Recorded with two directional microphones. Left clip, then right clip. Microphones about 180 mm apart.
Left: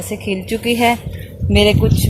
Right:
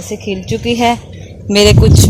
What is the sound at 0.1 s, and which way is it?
Speech, 30° right (ahead or behind).